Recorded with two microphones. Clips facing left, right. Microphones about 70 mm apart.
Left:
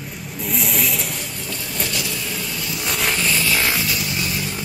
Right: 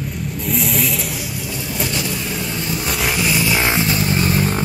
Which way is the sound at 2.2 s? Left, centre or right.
Right.